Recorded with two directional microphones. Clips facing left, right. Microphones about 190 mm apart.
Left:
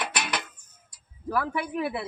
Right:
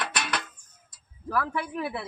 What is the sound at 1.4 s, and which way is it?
Speech, 15° left (ahead or behind).